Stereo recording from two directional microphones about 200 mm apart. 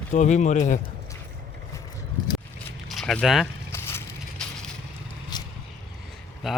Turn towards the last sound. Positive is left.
turn(degrees=0)  # may be behind; listen again after turning